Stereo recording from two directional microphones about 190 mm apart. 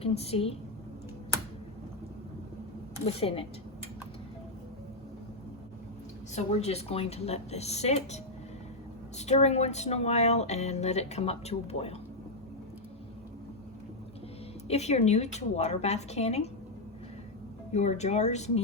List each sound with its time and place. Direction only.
0.0 s speech: 35° left (ahead or behind)
3.0 s speech: 30° left (ahead or behind)
6.3 s speech: 35° left (ahead or behind)
14.7 s speech: 35° left (ahead or behind)
17.7 s speech: 35° left (ahead or behind)